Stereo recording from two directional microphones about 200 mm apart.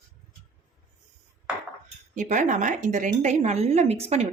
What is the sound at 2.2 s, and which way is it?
A woman's voice, 40° right (ahead or behind).